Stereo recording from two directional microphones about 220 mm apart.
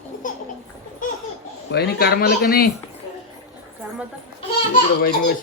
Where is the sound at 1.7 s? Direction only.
45° left (ahead or behind).